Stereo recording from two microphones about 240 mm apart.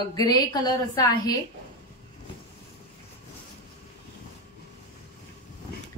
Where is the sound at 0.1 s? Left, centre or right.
Centre.